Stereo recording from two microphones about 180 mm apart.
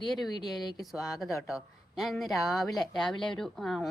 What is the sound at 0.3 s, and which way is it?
Speech, 25° left (ahead or behind).